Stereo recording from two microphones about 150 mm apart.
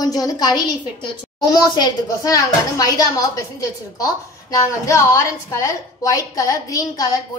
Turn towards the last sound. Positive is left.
turn(degrees=25)  # may be behind; listen again after turning